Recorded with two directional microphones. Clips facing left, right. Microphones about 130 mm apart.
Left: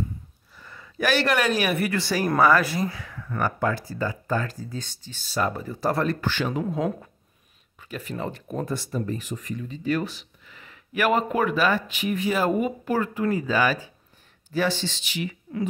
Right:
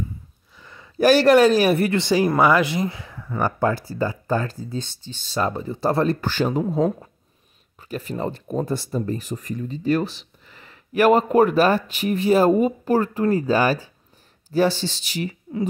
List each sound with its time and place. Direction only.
0.6 s a sound: 20° right (ahead or behind)
0.9 s speech: 35° right (ahead or behind)
7.8 s speech: 35° right (ahead or behind)